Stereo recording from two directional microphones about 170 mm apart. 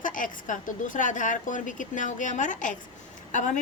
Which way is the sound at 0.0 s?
50° left (ahead or behind).